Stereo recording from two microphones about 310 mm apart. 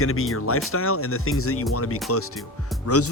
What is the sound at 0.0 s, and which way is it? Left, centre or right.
Speech, left.